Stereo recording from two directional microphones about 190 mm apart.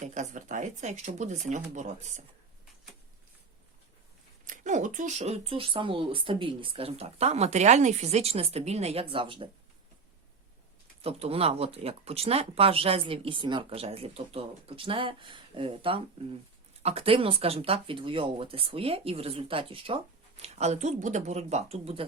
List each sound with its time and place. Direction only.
0.0 s speech: 40° right (ahead or behind)
4.4 s speech: 40° right (ahead or behind)
11.0 s speech: 30° right (ahead or behind)